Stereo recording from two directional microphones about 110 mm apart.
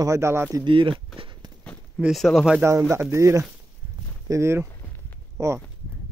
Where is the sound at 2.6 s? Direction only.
25° right (ahead or behind).